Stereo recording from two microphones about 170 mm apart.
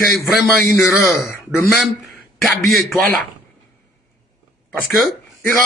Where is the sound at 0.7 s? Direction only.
15° left (ahead or behind).